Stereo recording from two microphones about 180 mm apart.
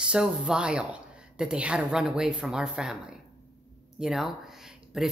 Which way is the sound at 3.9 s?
Centre (ahead or behind).